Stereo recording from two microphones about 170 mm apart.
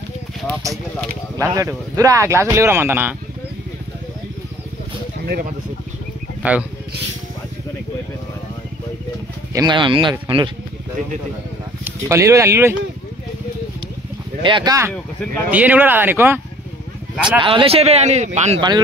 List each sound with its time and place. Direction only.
1.5 s speech: 20° right (ahead or behind)
5.2 s speech: 65° right (ahead or behind)
6.4 s speech: 10° right (ahead or behind)
9.5 s speech: 25° right (ahead or behind)
11.8 s speech: 15° right (ahead or behind)
14.4 s speech: 25° right (ahead or behind); by 17.4 s 5° right (ahead or behind)
17.4 s speech: 30° right (ahead or behind)